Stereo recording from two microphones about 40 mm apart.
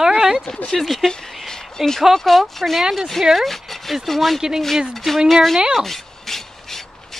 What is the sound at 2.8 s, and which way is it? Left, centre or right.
Speech, centre.